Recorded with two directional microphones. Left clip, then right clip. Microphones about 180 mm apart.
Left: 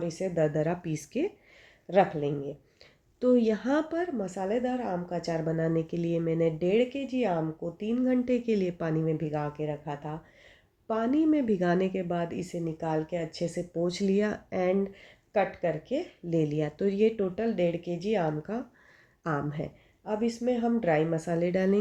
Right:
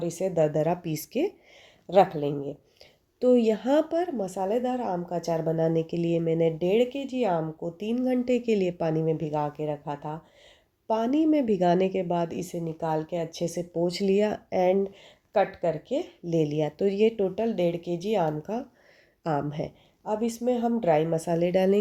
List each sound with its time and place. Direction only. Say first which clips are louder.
0.0 s speech: right 3 dB; 40° right (ahead or behind)
1.9 s speech: right 4 dB; 40° right (ahead or behind)
3.2 s speech: right 3 dB; 20° right (ahead or behind); by 10.2 s 40° right (ahead or behind)
10.8 s speech: right 2 dB; 30° right (ahead or behind)